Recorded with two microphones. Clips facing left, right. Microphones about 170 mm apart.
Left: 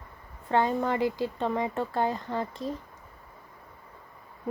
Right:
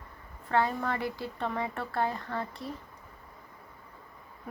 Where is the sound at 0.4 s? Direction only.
20° left (ahead or behind).